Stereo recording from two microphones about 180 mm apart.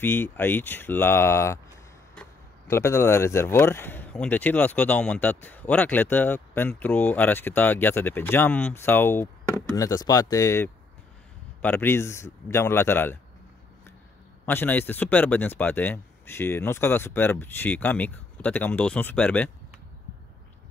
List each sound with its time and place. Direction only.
0.0 s speech: 10° left (ahead or behind)
2.7 s speech: 15° left (ahead or behind)
14.4 s speech: 10° left (ahead or behind)